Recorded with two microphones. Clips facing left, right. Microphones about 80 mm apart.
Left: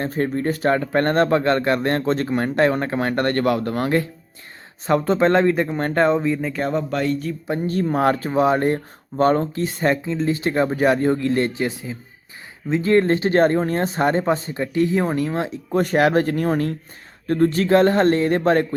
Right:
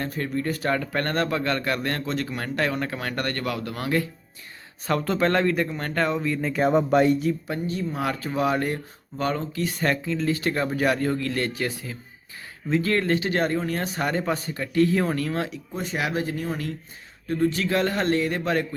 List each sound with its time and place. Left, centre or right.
0.0 s speech: left
4.9 s speech: left
6.4 s speech: centre
6.9 s speech: centre
7.7 s speech: left
9.6 s speech: left
15.7 s speech: left